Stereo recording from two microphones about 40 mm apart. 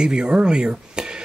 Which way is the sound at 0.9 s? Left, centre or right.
Right.